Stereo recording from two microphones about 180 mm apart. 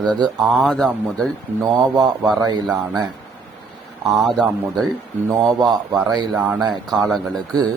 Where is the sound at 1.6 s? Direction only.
20° right (ahead or behind).